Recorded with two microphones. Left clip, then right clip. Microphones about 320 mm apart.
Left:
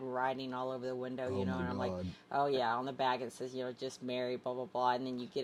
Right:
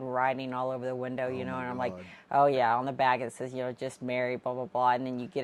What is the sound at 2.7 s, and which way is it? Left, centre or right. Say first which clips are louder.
Speech: right 8 dB; right.